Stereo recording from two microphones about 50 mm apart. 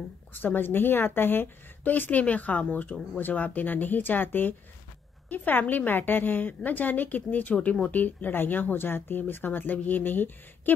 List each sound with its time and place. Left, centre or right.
0.3 s a woman's voice: left